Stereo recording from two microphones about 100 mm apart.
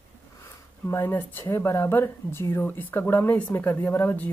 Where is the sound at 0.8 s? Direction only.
20° left (ahead or behind).